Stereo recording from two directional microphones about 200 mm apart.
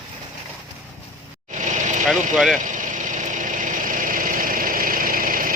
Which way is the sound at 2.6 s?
40° right (ahead or behind).